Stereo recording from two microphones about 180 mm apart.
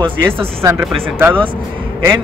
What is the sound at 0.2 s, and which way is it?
Speech, 15° right (ahead or behind).